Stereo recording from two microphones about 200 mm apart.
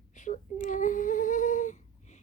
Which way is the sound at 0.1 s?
40° left (ahead or behind).